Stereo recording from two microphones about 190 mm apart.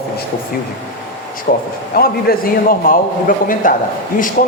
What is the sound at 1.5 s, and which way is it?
A man's voice, 50° left (ahead or behind).